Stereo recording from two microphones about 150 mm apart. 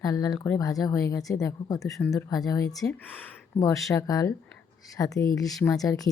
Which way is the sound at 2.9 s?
10° left (ahead or behind).